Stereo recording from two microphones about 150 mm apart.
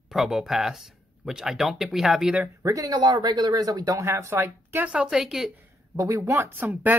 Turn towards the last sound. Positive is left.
turn(degrees=-10)  # may be behind; listen again after turning